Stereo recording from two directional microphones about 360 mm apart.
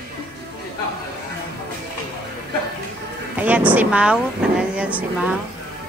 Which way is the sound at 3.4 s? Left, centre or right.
Centre.